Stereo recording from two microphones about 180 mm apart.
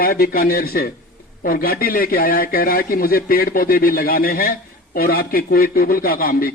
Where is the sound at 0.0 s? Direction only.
55° left (ahead or behind).